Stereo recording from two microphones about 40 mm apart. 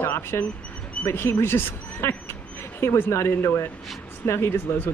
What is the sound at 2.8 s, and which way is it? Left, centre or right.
Speech, left.